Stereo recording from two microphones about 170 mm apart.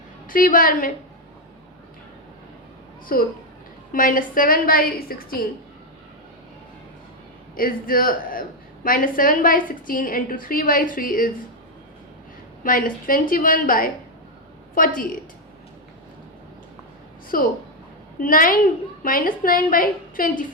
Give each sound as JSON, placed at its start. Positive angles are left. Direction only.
{"t": 0.3, "sound": "a woman's voice", "side_deg": 55}
{"t": 3.1, "sound": "a woman's voice", "side_deg": 60}
{"t": 7.5, "sound": "a woman's voice", "side_deg": 55}
{"t": 12.6, "sound": "a woman's voice", "side_deg": 55}
{"t": 17.3, "sound": "a woman's voice", "side_deg": 55}